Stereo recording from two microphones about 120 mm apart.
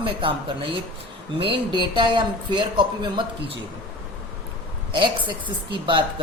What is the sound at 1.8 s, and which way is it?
Speech, 40° right (ahead or behind).